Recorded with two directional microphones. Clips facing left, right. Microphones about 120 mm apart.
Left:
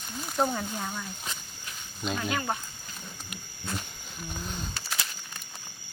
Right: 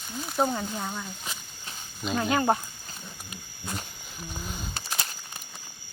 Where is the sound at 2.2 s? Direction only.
40° right (ahead or behind).